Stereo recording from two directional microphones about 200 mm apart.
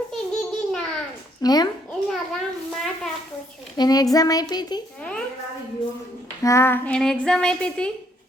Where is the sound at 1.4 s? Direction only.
20° left (ahead or behind).